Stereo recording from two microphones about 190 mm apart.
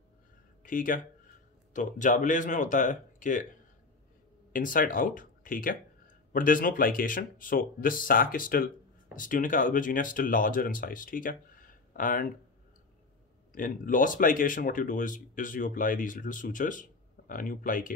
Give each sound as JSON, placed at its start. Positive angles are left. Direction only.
{"t": 0.7, "sound": "speech", "side_deg": 45}
{"t": 4.5, "sound": "speech", "side_deg": 45}
{"t": 13.6, "sound": "speech", "side_deg": 45}